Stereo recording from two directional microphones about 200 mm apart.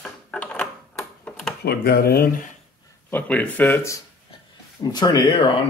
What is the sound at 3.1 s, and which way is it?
Speech, 10° left (ahead or behind).